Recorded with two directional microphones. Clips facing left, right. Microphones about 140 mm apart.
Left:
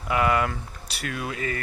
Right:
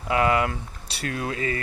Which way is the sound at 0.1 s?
25° right (ahead or behind).